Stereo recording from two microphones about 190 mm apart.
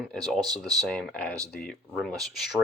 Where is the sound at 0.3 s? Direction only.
20° right (ahead or behind).